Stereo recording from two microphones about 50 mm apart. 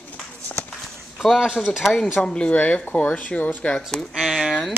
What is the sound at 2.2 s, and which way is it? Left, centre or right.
Speech, left.